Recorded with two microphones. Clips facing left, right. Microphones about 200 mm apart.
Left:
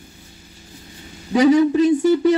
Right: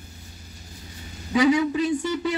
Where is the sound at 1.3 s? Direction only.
40° left (ahead or behind).